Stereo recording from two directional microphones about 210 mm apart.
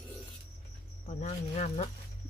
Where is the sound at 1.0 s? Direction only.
30° left (ahead or behind).